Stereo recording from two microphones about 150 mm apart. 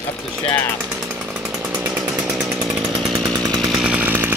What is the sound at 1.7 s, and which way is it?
Chainsaw, 10° right (ahead or behind).